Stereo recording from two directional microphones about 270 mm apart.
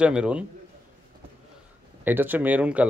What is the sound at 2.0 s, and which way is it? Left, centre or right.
Speech, centre.